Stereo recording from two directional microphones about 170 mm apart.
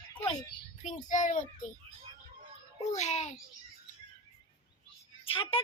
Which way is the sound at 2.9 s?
40° left (ahead or behind).